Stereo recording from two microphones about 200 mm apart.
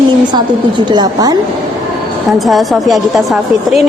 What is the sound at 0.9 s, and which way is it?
Speech, 20° right (ahead or behind).